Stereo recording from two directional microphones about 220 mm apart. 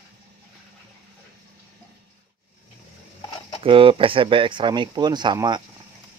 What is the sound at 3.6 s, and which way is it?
Speech, 25° right (ahead or behind).